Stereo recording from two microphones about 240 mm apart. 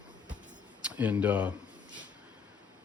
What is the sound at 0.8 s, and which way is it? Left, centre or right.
Speech, centre.